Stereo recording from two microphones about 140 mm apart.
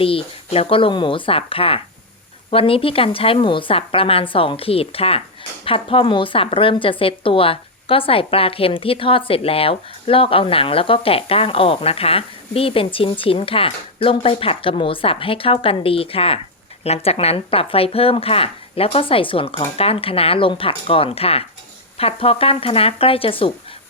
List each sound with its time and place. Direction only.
0.0 s a woman's voice: 40° left (ahead or behind)